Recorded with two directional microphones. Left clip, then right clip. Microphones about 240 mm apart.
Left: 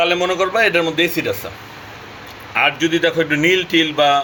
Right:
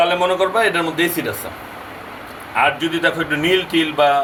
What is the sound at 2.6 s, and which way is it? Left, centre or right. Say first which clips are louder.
Speech: left 1 dB; left.